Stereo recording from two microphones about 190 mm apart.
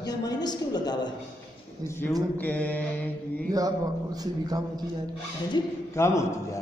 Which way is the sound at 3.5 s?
20° right (ahead or behind).